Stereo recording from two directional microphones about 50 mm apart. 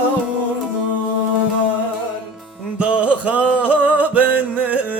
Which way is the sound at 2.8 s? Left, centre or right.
Right.